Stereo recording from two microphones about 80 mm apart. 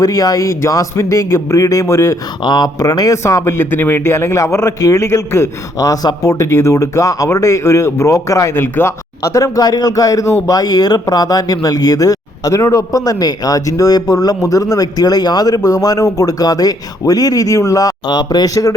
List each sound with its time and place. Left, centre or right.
0.0 s speech: left
2.4 s speech: left
2.7 s speech: left
3.6 s speech: left
8.5 s speech: left
9.2 s speech: left